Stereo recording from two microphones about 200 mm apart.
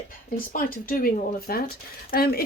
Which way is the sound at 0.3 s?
45° left (ahead or behind).